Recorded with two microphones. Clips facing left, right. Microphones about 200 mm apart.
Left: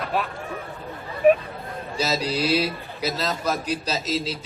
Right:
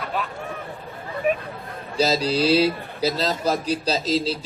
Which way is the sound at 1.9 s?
30° right (ahead or behind).